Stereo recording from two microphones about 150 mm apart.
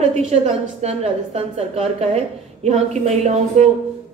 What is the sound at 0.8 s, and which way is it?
A woman's voice, 45° right (ahead or behind).